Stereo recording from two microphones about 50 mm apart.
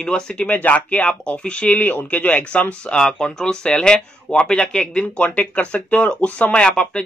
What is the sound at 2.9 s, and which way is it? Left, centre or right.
Speech, centre.